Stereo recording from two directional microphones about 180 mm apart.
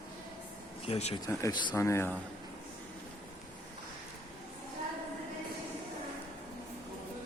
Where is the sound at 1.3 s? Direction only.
20° left (ahead or behind).